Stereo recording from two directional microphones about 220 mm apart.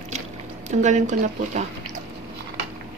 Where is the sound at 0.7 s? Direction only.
35° right (ahead or behind).